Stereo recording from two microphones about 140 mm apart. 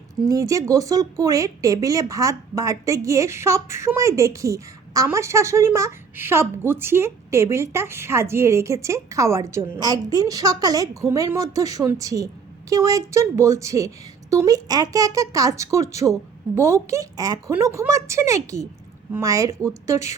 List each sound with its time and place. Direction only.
0.3 s speech: 25° right (ahead or behind)